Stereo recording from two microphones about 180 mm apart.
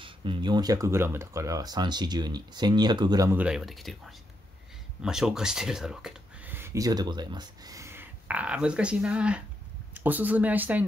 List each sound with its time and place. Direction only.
0.0 s speech: 30° right (ahead or behind)
3.3 s speech: 5° right (ahead or behind)